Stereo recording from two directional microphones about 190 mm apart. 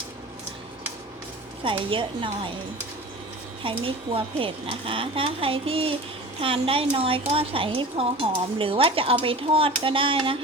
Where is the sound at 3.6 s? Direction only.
30° right (ahead or behind).